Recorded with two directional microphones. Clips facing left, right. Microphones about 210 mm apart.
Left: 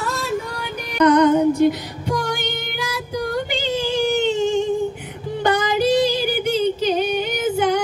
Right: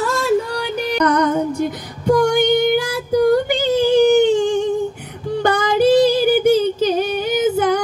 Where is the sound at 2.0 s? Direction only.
50° right (ahead or behind).